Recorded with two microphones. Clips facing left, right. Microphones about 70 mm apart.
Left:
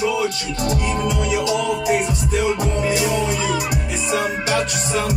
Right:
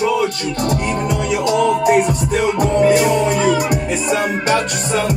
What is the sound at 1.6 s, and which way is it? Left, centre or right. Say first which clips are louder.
Music: right 6 dB; right.